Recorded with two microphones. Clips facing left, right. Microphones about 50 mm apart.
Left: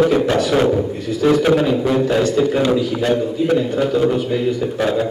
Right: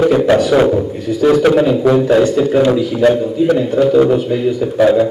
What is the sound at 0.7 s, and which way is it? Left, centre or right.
A man's voice, centre.